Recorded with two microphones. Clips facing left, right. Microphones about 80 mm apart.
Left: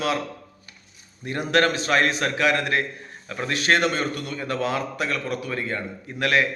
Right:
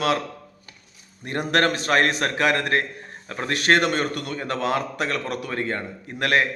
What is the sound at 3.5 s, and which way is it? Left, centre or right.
A man's voice, right.